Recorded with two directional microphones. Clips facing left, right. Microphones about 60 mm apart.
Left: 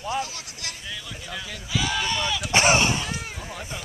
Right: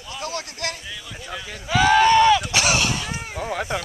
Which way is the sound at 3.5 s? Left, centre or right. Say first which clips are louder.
Right 13 dB; right.